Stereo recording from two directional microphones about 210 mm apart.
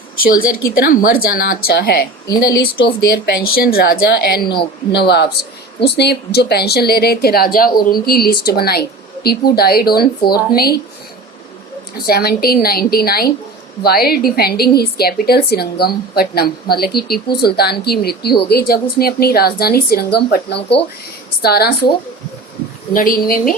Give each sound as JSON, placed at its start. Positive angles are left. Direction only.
{"t": 0.2, "sound": "a woman's voice", "side_deg": 45}
{"t": 2.2, "sound": "speech", "side_deg": 15}
{"t": 2.8, "sound": "a woman's voice", "side_deg": 50}
{"t": 12.0, "sound": "a woman's voice", "side_deg": 50}